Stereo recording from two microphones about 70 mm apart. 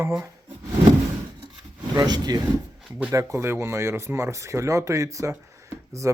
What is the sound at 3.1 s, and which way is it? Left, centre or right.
Speech, right.